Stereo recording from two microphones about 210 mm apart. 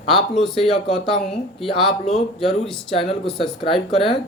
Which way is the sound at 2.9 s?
25° left (ahead or behind).